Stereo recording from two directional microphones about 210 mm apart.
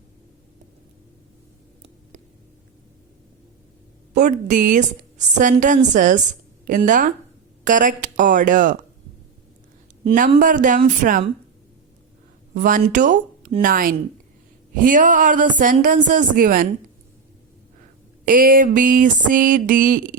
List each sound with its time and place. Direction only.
4.1 s a woman's voice: 35° right (ahead or behind)
10.2 s a woman's voice: 40° right (ahead or behind)
12.5 s a woman's voice: 40° right (ahead or behind)
18.3 s a woman's voice: 40° right (ahead or behind)